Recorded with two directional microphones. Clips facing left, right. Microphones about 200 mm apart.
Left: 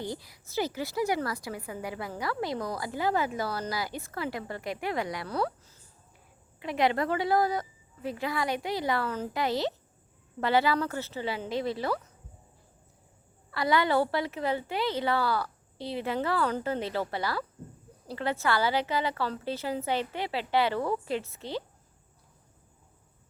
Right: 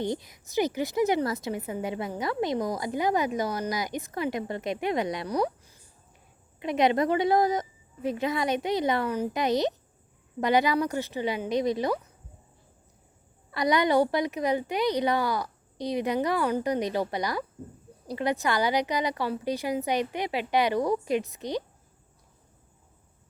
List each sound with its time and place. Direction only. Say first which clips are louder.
0.0 s a woman's voice: right 6 dB; 20° right (ahead or behind)
13.5 s a woman's voice: right 3 dB; 20° right (ahead or behind)